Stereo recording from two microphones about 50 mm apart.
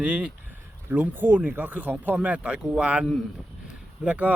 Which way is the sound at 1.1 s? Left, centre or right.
Right.